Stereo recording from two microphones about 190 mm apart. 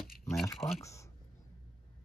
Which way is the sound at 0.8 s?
15° left (ahead or behind).